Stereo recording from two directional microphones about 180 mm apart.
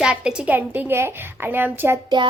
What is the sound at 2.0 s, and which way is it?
Speech, 25° right (ahead or behind).